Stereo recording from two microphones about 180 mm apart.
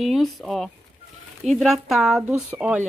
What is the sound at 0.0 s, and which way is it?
Speech, centre (ahead or behind).